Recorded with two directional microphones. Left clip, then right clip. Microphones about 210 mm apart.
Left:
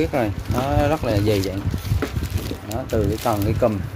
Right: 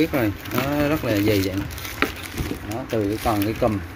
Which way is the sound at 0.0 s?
5° left (ahead or behind).